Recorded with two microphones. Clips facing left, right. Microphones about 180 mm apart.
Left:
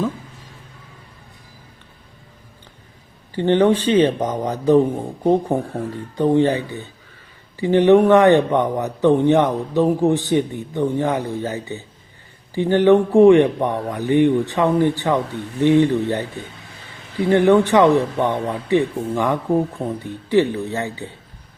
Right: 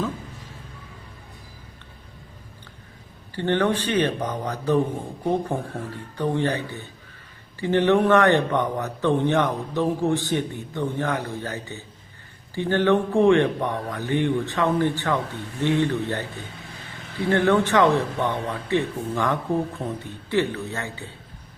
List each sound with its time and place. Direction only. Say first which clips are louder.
3.3 s a man's voice: left 7 dB; 15° left (ahead or behind)
17.2 s a man's voice: left 6 dB; 15° left (ahead or behind)